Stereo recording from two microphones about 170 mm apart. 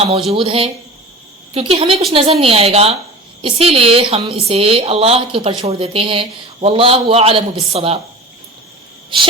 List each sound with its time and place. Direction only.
0.3 s a woman's voice: 35° right (ahead or behind)